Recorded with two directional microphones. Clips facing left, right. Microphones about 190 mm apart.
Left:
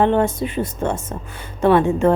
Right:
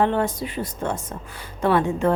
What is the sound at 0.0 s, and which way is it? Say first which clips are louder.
A woman's voice: left 4 dB; 25° left (ahead or behind).